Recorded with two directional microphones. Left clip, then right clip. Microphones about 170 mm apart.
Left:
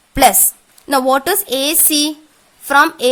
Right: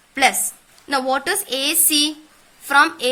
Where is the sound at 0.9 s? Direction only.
65° left (ahead or behind).